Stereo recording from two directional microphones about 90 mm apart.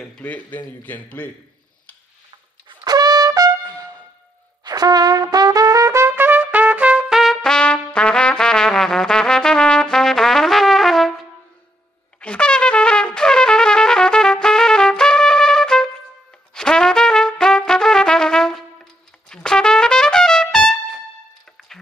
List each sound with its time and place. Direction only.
0.2 s a man's voice: 15° left (ahead or behind)
2.8 s trumpet: 45° right (ahead or behind); by 11.1 s centre (ahead or behind)
12.2 s trumpet: 10° left (ahead or behind)